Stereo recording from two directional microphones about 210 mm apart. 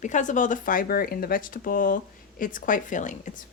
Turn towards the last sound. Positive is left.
turn(degrees=35)  # may be behind; listen again after turning